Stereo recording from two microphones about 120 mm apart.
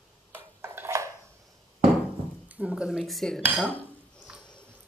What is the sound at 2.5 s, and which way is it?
Speech, 10° right (ahead or behind).